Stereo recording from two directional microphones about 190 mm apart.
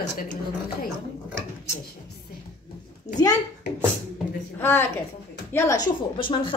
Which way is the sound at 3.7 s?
65° left (ahead or behind).